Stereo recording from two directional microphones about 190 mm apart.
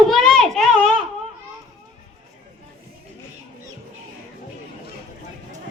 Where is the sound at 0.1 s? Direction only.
Centre (ahead or behind).